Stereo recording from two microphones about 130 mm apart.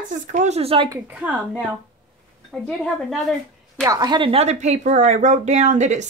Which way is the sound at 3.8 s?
30° right (ahead or behind).